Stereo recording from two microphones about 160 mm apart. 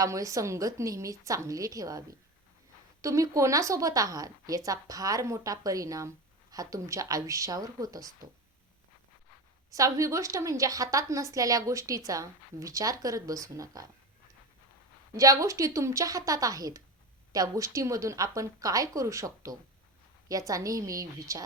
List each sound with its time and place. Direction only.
0.0 s a woman's voice: 20° right (ahead or behind)
9.7 s a woman's voice: 20° right (ahead or behind)
15.1 s a woman's voice: 20° right (ahead or behind)